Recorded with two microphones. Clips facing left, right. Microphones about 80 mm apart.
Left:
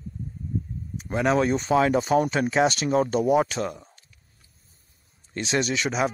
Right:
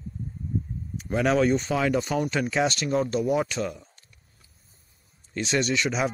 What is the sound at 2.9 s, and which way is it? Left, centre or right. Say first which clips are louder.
Speech: left 3 dB; left.